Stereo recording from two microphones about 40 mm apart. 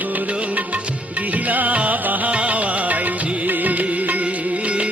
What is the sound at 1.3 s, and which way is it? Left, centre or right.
Music, right.